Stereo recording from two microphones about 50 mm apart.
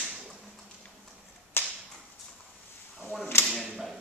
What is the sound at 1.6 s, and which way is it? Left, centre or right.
Whip, left.